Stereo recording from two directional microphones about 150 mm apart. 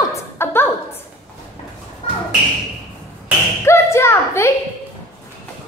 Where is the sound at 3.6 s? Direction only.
15° left (ahead or behind).